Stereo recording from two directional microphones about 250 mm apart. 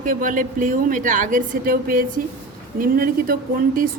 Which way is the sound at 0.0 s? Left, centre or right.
Right.